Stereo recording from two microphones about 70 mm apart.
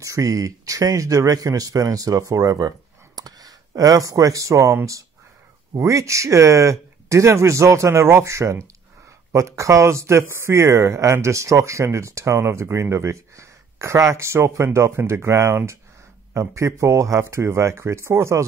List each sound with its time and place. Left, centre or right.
0.0 s a man's voice: right
5.8 s speech: right